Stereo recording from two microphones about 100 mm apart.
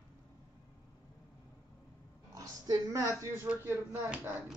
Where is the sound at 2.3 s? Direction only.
35° right (ahead or behind).